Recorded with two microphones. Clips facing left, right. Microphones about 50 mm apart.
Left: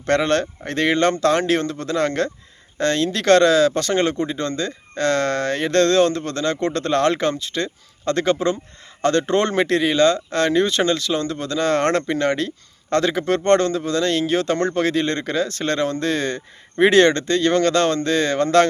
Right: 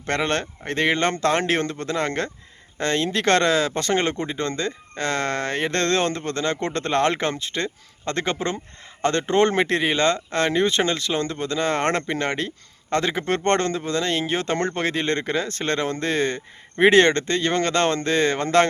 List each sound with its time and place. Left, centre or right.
0.0 s speech: centre